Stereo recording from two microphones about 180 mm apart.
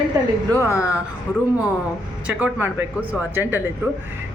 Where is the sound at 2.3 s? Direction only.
10° right (ahead or behind).